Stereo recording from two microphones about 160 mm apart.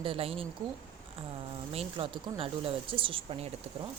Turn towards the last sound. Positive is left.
turn(degrees=-40)  # may be behind; listen again after turning